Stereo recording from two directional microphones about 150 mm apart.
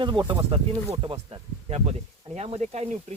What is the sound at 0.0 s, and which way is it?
Speech, 30° right (ahead or behind).